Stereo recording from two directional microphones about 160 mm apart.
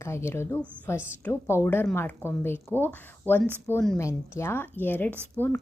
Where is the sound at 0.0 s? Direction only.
15° left (ahead or behind).